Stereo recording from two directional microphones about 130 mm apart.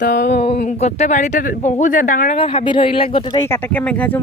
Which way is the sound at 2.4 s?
40° left (ahead or behind).